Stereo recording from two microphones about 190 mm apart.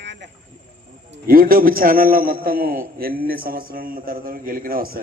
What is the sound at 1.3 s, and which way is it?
Speech, 50° right (ahead or behind).